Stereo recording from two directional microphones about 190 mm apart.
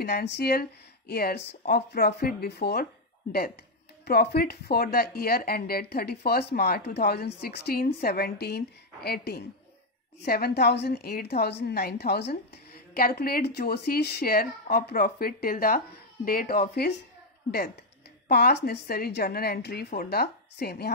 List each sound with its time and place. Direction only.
0.0 s a woman's voice: 60° left (ahead or behind)
18.3 s speech: 60° left (ahead or behind)